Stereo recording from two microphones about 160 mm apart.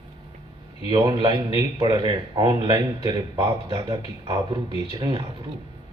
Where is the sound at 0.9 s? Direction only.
30° right (ahead or behind).